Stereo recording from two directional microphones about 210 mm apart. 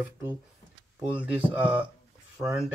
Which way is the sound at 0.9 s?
5° right (ahead or behind).